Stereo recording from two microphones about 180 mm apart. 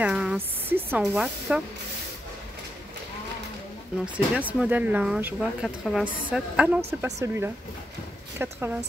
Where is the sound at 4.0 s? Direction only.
5° right (ahead or behind).